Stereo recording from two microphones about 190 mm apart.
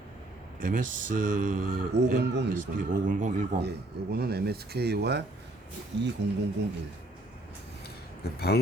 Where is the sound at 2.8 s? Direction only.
45° right (ahead or behind).